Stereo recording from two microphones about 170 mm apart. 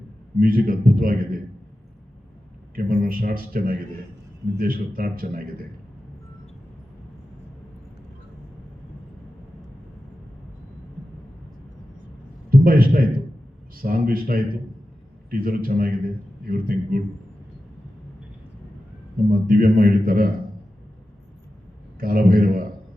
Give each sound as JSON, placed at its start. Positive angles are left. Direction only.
{"t": 0.3, "sound": "a man's voice", "side_deg": -55}
{"t": 2.7, "sound": "a man's voice", "side_deg": -60}
{"t": 12.6, "sound": "a sound", "side_deg": -60}
{"t": 13.7, "sound": "a man's voice", "side_deg": -60}
{"t": 19.3, "sound": "a man's voice", "side_deg": -60}
{"t": 22.0, "sound": "a man's voice", "side_deg": -60}